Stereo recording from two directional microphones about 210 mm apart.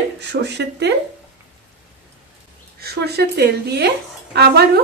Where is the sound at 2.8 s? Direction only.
50° right (ahead or behind).